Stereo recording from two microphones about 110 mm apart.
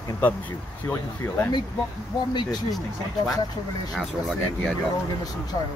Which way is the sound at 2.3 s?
40° left (ahead or behind).